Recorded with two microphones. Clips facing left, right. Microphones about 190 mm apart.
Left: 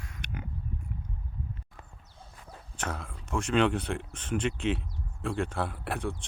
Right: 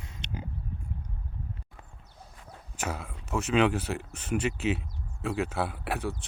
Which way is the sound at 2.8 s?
5° right (ahead or behind).